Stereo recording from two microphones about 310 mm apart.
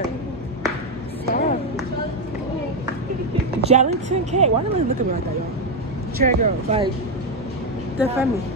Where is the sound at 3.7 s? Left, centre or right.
Right.